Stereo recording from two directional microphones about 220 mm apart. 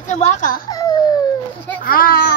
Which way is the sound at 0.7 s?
15° left (ahead or behind).